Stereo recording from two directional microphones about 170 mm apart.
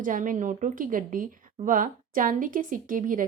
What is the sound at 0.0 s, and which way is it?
A woman's voice, 50° right (ahead or behind).